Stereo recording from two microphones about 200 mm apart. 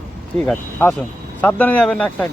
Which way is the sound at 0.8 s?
10° left (ahead or behind).